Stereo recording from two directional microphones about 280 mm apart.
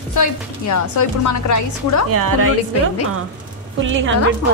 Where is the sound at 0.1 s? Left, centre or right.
Left.